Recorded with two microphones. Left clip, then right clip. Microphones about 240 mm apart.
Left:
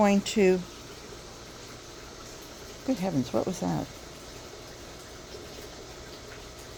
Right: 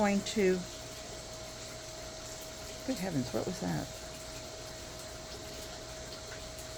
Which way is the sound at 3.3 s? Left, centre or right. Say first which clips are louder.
Left 8 dB; left.